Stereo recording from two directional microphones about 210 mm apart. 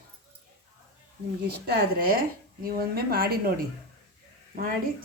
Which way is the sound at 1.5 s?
45° right (ahead or behind).